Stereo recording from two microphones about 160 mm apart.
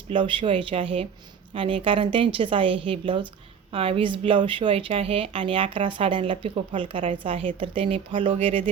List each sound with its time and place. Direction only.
0.1 s speech: 30° right (ahead or behind)